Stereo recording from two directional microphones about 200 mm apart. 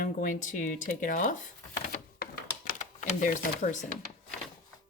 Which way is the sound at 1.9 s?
50° left (ahead or behind).